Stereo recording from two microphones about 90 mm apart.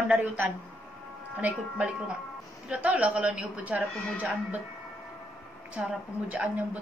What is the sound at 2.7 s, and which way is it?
A woman's voice, 15° right (ahead or behind).